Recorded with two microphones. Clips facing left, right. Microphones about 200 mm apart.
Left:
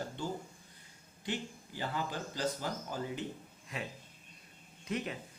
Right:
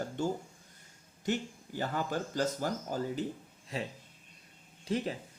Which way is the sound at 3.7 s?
30° right (ahead or behind).